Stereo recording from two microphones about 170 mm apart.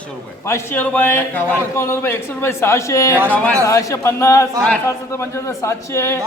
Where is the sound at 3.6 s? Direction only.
20° left (ahead or behind).